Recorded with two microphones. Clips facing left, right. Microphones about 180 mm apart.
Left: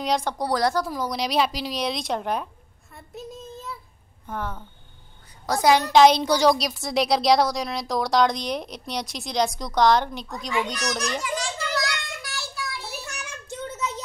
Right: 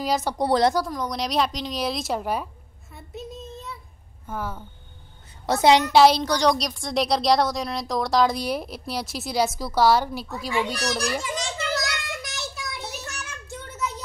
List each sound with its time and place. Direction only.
0.0 s speech: 5° right (ahead or behind)
0.4 s speech: 25° right (ahead or behind)
0.8 s a woman's voice: 5° left (ahead or behind)
5.5 s speech: 25° right (ahead or behind)
5.9 s speech: 5° right (ahead or behind)
6.2 s speech: 5° left (ahead or behind)
11.3 s child singing: 20° right (ahead or behind)
13.2 s child singing: 20° left (ahead or behind)